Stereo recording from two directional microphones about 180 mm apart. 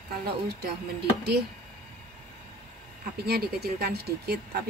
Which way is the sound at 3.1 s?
60° right (ahead or behind).